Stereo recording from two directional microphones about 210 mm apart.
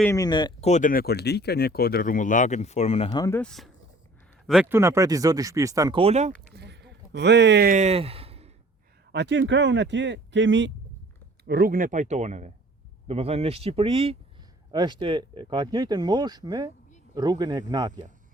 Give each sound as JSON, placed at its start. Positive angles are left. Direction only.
{"t": 0.0, "sound": "speech", "side_deg": 15}
{"t": 0.7, "sound": "speech", "side_deg": 40}
{"t": 6.5, "sound": "a sound", "side_deg": -50}
{"t": 7.7, "sound": "speech", "side_deg": -30}
{"t": 9.1, "sound": "speech", "side_deg": -55}
{"t": 11.4, "sound": "speech", "side_deg": -45}